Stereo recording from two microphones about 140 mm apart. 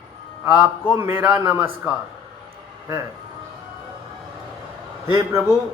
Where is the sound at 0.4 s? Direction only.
15° right (ahead or behind).